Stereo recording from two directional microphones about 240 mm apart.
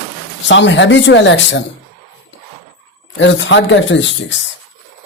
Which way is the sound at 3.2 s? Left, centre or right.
Left.